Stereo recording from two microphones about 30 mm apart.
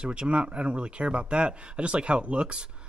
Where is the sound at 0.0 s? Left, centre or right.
Right.